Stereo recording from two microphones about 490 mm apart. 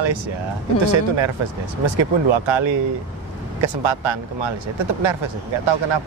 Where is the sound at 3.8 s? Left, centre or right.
Right.